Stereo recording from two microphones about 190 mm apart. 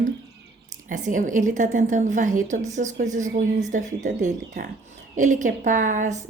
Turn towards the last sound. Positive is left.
turn(degrees=-40)  # may be behind; listen again after turning